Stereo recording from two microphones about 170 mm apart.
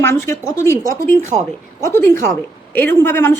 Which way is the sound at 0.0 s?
15° left (ahead or behind).